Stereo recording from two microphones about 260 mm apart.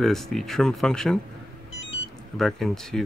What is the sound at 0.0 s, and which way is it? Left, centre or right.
Speech, centre.